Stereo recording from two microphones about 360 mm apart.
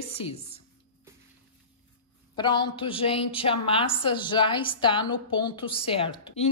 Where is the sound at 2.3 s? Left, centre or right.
Centre.